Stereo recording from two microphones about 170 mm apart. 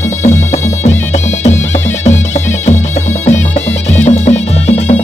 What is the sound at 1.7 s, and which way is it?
Music, 45° left (ahead or behind).